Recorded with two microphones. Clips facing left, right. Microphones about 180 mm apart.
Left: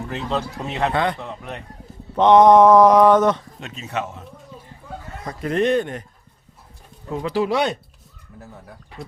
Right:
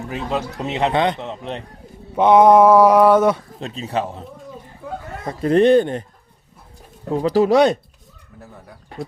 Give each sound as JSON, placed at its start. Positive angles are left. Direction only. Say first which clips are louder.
{"t": 0.1, "sound": "speech", "louder": "right 2 dB", "side_deg": -10}
{"t": 2.1, "sound": "a sound", "louder": "even", "side_deg": -10}
{"t": 3.6, "sound": "speech", "louder": "right 4 dB", "side_deg": -35}
{"t": 7.1, "sound": "speech", "louder": "right 6 dB", "side_deg": -35}
{"t": 8.4, "sound": "speech", "louder": "even", "side_deg": 0}